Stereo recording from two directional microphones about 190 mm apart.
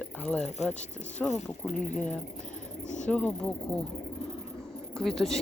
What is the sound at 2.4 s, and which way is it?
Cricket, 40° left (ahead or behind).